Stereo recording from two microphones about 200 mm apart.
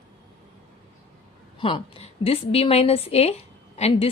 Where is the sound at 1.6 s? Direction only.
25° left (ahead or behind).